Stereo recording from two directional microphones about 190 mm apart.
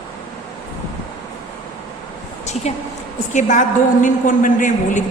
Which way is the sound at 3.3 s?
40° left (ahead or behind).